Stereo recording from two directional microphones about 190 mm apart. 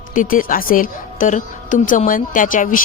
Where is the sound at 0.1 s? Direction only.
45° left (ahead or behind).